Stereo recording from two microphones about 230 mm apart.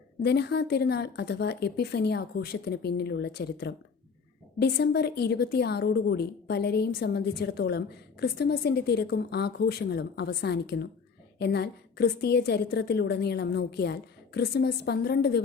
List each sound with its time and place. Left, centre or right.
0.2 s a woman's voice: left